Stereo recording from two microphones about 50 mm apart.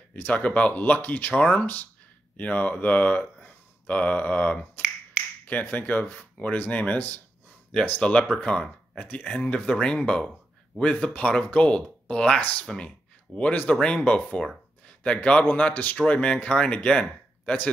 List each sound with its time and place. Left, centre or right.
0.3 s speech: left
12.4 s speech: left
12.6 s speech: centre
15.7 s speech: left